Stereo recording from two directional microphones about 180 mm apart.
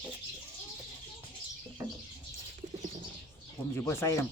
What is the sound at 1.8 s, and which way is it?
Bird, 20° right (ahead or behind).